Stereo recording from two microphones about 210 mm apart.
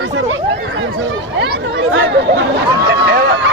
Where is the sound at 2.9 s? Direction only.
50° right (ahead or behind).